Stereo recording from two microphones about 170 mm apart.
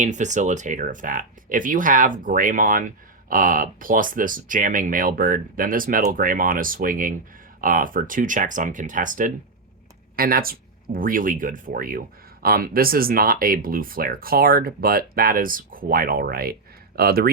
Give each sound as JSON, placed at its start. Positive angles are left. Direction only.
{"t": 0.0, "sound": "speech", "side_deg": -45}